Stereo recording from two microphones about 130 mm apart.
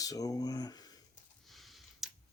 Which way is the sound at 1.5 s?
Centre (ahead or behind).